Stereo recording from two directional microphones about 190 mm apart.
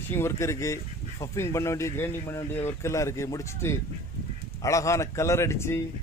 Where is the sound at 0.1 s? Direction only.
15° left (ahead or behind).